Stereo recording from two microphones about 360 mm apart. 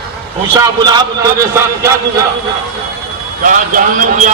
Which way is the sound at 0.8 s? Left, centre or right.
Centre.